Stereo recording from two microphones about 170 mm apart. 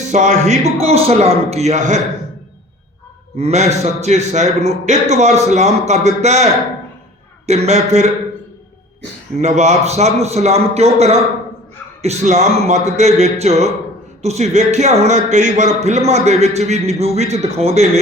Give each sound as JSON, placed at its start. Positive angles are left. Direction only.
{"t": 0.1, "sound": "a man's voice", "side_deg": -45}
{"t": 3.3, "sound": "a man's voice", "side_deg": -40}
{"t": 9.4, "sound": "a man's voice", "side_deg": -40}